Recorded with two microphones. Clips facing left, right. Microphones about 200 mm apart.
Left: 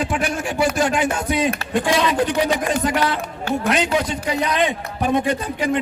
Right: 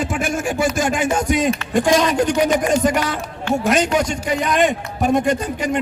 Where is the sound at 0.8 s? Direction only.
45° right (ahead or behind).